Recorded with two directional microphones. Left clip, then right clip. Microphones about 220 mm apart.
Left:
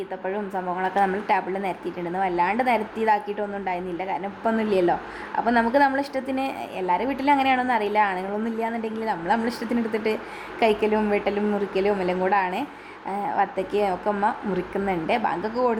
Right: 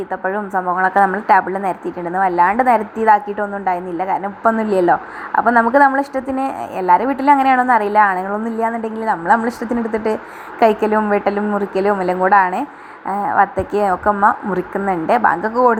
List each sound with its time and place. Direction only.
0.3 s a woman's voice: 10° right (ahead or behind)